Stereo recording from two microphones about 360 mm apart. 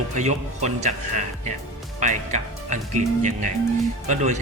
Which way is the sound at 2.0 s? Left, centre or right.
Centre.